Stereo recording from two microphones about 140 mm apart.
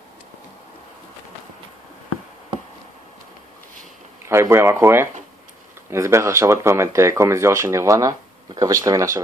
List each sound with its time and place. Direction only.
4.3 s speech: 20° right (ahead or behind)